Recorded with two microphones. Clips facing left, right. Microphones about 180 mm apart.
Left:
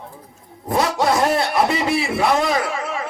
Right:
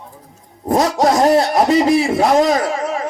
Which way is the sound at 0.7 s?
40° right (ahead or behind).